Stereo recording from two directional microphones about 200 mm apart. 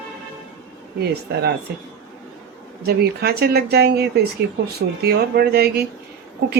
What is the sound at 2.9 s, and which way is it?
A woman's voice, 50° right (ahead or behind).